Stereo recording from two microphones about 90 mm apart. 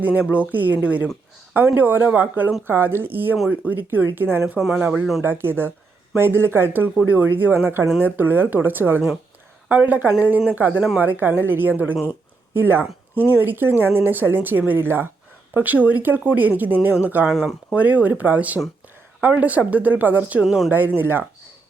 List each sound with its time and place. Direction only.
0.0 s speech: 15° right (ahead or behind)
17.3 s speech: centre (ahead or behind)
17.7 s speech: 15° right (ahead or behind)